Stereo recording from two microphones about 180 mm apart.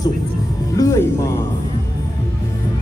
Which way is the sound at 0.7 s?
15° left (ahead or behind).